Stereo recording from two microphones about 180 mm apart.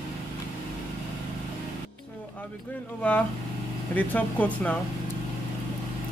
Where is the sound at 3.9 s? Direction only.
10° left (ahead or behind).